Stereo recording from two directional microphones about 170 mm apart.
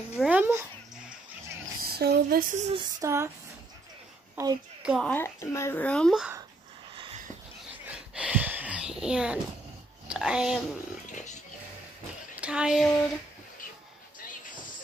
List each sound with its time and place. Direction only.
0.1 s dog: 5° right (ahead or behind)
1.9 s a sound: 65° right (ahead or behind); by 2.7 s 50° right (ahead or behind)
2.7 s female singing: 25° right (ahead or behind)
4.4 s a woman's voice: 15° right (ahead or behind)
5.0 s speech: 15° left (ahead or behind)
7.9 s a sound: 5° right (ahead or behind)
10.0 s speech: 5° right (ahead or behind)
11.1 s pig: 45° left (ahead or behind)
12.4 s speech: 5° right (ahead or behind)